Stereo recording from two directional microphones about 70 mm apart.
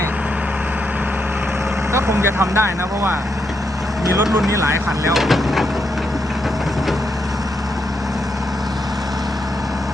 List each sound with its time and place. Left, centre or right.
1.9 s speech: right
4.4 s speech: right
4.9 s speech: centre